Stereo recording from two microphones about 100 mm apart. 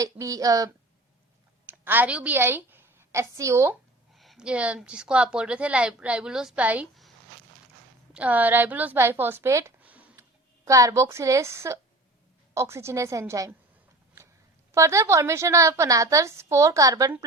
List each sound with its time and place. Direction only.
0.0 s a woman's voice: 35° right (ahead or behind)
1.8 s a woman's voice: 20° right (ahead or behind)
4.1 s a sound: centre (ahead or behind)
4.4 s a woman's voice: 10° right (ahead or behind)
8.1 s a woman's voice: 15° right (ahead or behind)
9.8 s a sound: 15° right (ahead or behind)
10.7 s a woman's voice: 35° right (ahead or behind)
14.7 s a woman's voice: 30° right (ahead or behind)